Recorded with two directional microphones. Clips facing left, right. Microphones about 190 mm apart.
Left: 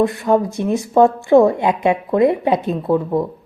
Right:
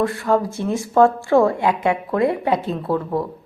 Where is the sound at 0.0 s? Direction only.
20° left (ahead or behind).